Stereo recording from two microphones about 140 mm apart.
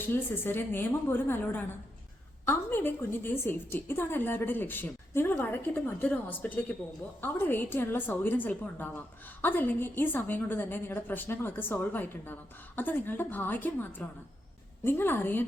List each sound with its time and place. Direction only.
0.0 s a woman's voice: 15° left (ahead or behind)